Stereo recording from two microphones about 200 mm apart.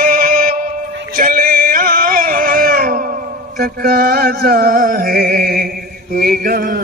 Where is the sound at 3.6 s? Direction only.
50° right (ahead or behind).